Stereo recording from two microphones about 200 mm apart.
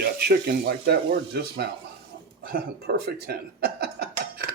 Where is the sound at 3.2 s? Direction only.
55° right (ahead or behind).